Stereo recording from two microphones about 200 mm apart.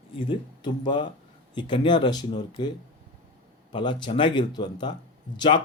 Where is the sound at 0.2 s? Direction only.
25° left (ahead or behind).